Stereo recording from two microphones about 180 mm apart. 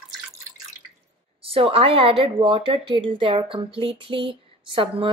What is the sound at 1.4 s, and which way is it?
Speech, 30° right (ahead or behind).